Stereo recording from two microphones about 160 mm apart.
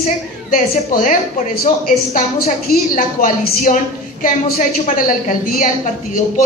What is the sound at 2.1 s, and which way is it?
A woman's voice, 50° left (ahead or behind).